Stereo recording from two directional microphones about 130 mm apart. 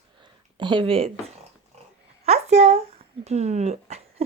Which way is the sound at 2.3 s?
55° right (ahead or behind).